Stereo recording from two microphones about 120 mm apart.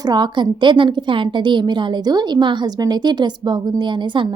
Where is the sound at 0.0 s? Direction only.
35° right (ahead or behind).